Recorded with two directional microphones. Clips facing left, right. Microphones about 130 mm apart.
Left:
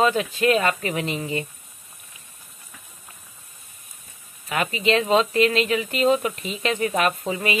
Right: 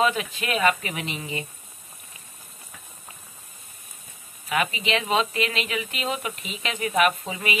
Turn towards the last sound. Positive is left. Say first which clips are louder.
# left 3 dB
turn(degrees=40)  # may be behind; listen again after turning